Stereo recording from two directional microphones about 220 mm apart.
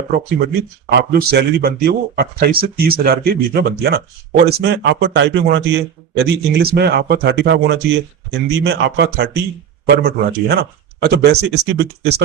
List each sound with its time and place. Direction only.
0.9 s a man's voice: 45° right (ahead or behind)